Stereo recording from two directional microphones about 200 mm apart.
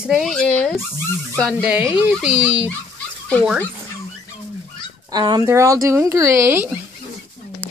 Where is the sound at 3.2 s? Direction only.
5° left (ahead or behind).